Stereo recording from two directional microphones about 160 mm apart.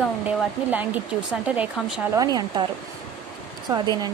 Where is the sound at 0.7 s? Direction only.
10° right (ahead or behind).